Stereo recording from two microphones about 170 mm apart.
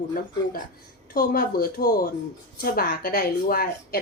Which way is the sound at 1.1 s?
60° left (ahead or behind).